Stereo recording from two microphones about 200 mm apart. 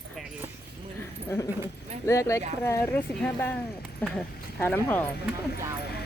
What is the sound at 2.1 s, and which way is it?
Speech, 15° left (ahead or behind).